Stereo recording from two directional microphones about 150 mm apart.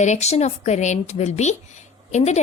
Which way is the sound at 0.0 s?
50° left (ahead or behind).